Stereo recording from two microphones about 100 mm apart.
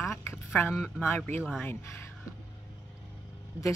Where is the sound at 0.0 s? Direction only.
25° left (ahead or behind).